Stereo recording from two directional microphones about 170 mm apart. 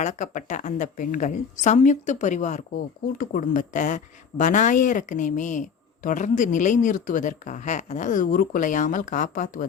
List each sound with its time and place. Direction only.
0.0 s a woman's voice: 45° left (ahead or behind)